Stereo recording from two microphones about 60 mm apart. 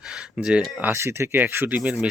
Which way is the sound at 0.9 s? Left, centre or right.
Right.